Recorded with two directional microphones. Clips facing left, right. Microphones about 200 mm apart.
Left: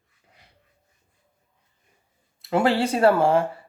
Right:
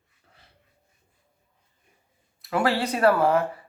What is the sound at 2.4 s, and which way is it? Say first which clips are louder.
Speech: left 3 dB; 25° left (ahead or behind).